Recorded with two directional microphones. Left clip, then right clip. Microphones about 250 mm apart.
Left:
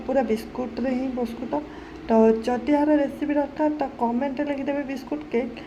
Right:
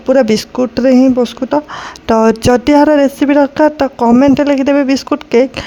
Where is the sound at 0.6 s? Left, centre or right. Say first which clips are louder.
Right 18 dB; right.